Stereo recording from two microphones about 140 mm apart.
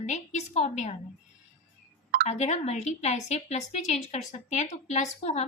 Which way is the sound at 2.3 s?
55° left (ahead or behind).